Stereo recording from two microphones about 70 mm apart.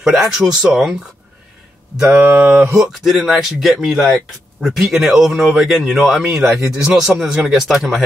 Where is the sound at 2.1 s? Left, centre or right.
Right.